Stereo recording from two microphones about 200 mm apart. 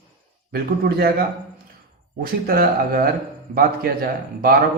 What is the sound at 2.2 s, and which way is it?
A man's voice, 45° right (ahead or behind).